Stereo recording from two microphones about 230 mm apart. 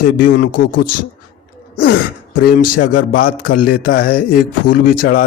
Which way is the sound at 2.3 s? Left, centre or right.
Left.